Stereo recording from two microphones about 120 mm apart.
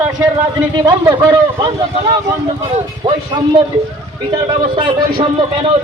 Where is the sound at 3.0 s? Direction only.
40° right (ahead or behind).